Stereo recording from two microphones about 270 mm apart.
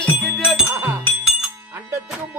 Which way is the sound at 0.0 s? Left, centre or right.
Centre.